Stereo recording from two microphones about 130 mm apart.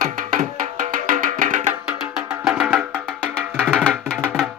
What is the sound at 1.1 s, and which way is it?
Music, 90° right.